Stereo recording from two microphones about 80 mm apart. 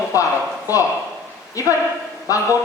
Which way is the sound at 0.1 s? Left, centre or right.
Left.